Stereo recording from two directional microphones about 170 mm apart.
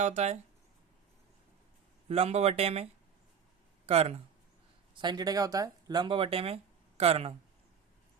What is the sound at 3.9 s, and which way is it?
Speech, 35° right (ahead or behind).